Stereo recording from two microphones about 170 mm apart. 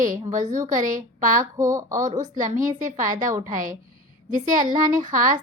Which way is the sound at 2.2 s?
50° right (ahead or behind).